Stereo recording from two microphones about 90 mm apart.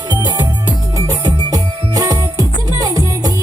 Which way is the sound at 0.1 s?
50° right (ahead or behind).